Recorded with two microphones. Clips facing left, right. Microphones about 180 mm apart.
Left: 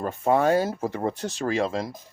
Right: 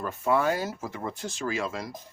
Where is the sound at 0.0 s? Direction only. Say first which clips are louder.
Left 4 dB; 35° left (ahead or behind).